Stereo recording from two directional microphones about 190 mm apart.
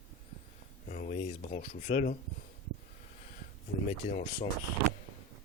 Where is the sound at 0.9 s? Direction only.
40° left (ahead or behind).